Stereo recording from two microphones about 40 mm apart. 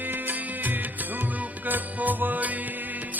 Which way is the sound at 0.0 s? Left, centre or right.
Right.